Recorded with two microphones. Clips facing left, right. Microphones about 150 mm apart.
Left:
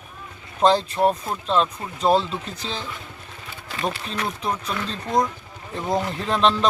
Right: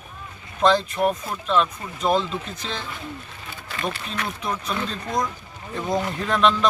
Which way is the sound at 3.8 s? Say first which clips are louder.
Left 2 dB; 35° left (ahead or behind).